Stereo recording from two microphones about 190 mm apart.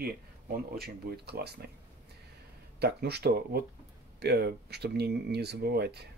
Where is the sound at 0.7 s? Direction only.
55° right (ahead or behind).